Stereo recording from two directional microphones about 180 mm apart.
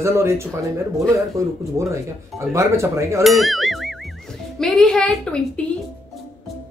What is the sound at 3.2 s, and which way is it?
Speech, centre (ahead or behind).